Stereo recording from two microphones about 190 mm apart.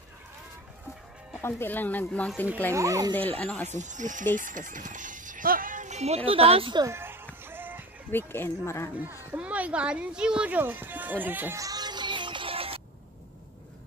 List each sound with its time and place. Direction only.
1.4 s speech: 10° left (ahead or behind)
2.7 s a child's voice: 15° right (ahead or behind)
3.2 s speech: 10° left (ahead or behind)
3.6 s speech: 40° right (ahead or behind); by 7.2 s 15° right (ahead or behind)
7.4 s music: 10° right (ahead or behind)
8.1 s speech: 10° left (ahead or behind)
9.3 s speech: 5° right (ahead or behind); by 12.8 s 30° right (ahead or behind)